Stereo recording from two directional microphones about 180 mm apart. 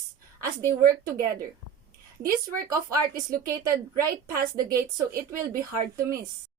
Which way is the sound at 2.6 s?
20° right (ahead or behind).